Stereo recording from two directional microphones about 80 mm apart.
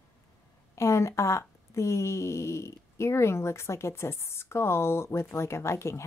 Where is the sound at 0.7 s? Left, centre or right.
Left.